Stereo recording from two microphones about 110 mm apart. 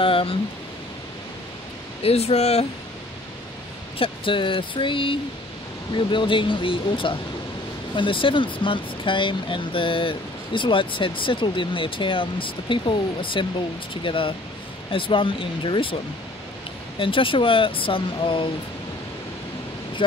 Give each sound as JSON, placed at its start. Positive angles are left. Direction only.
{"t": 0.0, "sound": "speech", "side_deg": 55}
{"t": 2.0, "sound": "speech", "side_deg": 70}
{"t": 4.0, "sound": "speech", "side_deg": 50}
{"t": 17.0, "sound": "speech", "side_deg": 50}
{"t": 20.0, "sound": "speech", "side_deg": 50}